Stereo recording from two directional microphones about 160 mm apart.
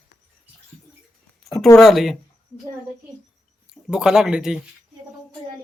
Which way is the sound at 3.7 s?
5° right (ahead or behind).